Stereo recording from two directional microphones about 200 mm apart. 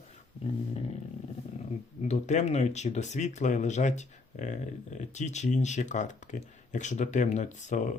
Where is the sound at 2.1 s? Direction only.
35° left (ahead or behind).